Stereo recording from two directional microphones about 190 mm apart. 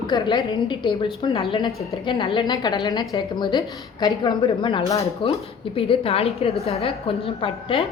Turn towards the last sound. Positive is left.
turn(degrees=30)  # may be behind; listen again after turning